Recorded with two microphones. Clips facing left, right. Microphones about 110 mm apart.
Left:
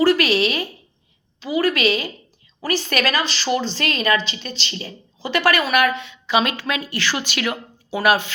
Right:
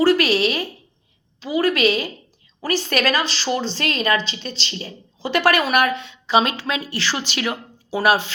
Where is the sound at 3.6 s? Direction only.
45° left (ahead or behind).